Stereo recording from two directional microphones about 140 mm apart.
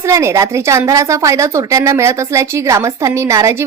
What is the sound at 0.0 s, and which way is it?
A woman's voice, 20° right (ahead or behind).